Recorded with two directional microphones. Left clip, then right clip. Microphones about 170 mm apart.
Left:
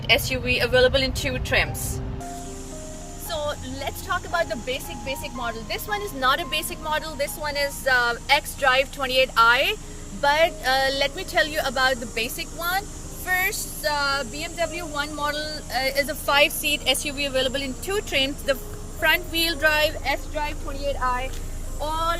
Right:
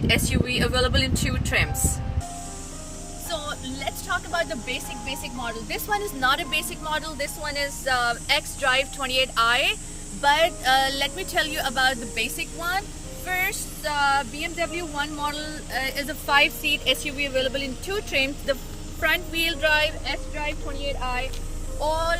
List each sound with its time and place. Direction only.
0.1 s a woman's voice: 40° left (ahead or behind)
3.2 s a woman's voice: 50° left (ahead or behind); by 20.5 s 20° left (ahead or behind)
21.8 s speech: 45° right (ahead or behind)